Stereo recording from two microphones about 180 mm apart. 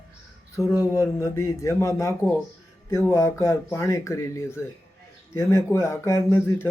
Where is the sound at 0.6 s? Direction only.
Centre (ahead or behind).